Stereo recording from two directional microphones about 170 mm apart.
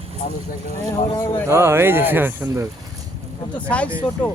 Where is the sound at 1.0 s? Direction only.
25° left (ahead or behind).